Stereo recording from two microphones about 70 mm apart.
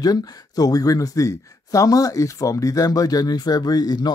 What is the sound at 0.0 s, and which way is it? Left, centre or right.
Speech, left.